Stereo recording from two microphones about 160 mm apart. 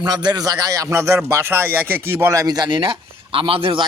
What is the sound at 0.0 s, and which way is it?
Speech, 25° right (ahead or behind).